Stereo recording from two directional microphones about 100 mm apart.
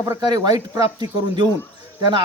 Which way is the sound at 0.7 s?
70° left (ahead or behind).